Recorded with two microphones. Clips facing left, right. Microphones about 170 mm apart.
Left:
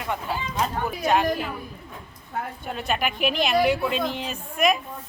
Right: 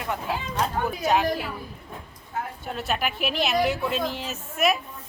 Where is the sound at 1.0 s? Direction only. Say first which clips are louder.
Left 1 dB; 5° right (ahead or behind).